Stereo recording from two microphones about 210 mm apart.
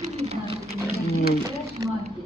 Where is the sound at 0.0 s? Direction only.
30° right (ahead or behind).